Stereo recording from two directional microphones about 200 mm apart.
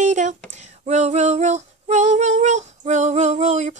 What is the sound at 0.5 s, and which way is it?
Female singing, 35° right (ahead or behind).